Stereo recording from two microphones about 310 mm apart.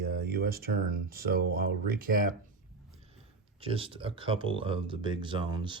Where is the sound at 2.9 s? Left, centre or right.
Centre.